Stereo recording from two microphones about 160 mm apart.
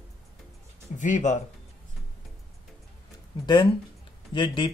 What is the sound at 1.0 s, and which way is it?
Speech, 50° left (ahead or behind).